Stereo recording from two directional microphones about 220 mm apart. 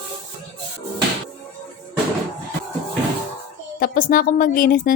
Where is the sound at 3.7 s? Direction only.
40° left (ahead or behind).